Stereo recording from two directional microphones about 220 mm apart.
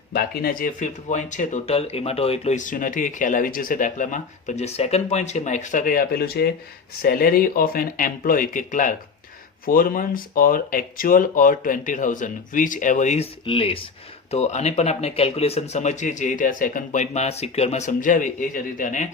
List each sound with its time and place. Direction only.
0.1 s speech: 40° left (ahead or behind)